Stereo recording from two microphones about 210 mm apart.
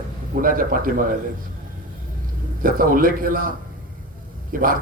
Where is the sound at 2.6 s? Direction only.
40° right (ahead or behind).